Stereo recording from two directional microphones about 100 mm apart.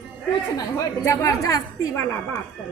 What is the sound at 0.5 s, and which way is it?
A woman's voice, 35° left (ahead or behind).